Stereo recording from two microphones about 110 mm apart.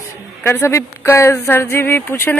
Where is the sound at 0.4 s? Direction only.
20° left (ahead or behind).